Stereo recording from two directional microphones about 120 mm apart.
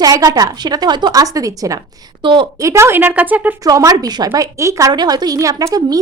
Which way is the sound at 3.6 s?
30° right (ahead or behind).